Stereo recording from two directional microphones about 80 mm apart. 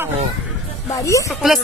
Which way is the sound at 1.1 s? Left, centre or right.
Left.